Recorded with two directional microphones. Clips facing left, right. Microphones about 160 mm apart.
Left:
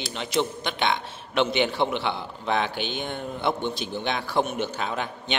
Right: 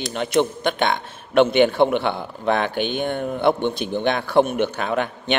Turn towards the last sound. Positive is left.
turn(degrees=-55)  # may be behind; listen again after turning